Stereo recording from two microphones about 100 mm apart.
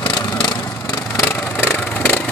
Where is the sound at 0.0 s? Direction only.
50° left (ahead or behind).